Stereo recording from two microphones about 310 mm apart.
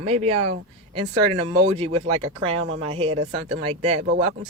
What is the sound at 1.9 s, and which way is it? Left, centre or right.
Speech, right.